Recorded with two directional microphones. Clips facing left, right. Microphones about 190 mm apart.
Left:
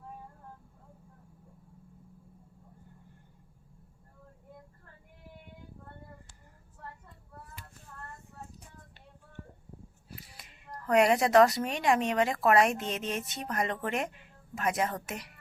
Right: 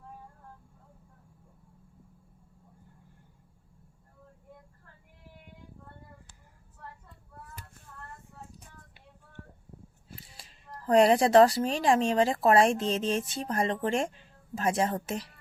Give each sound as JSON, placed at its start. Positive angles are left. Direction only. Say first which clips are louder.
{"t": 10.1, "sound": "speech", "louder": "even", "side_deg": -25}